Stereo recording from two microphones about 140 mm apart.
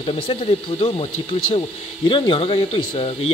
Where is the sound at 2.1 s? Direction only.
35° left (ahead or behind).